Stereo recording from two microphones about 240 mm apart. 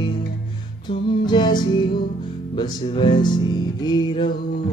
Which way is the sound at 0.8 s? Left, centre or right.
Centre.